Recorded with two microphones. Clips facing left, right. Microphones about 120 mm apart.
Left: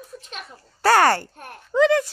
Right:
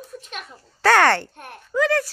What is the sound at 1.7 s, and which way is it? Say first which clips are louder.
Speech: left 3 dB; 20° left (ahead or behind).